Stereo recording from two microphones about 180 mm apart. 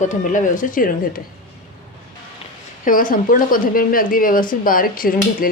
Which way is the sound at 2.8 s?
50° left (ahead or behind).